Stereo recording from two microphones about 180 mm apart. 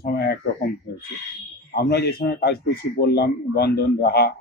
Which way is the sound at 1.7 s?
60° left (ahead or behind).